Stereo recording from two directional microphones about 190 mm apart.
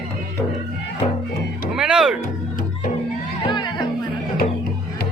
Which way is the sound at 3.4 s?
25° left (ahead or behind).